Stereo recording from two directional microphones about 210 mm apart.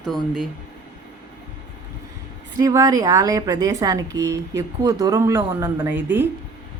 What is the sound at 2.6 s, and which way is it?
Speech, 15° right (ahead or behind).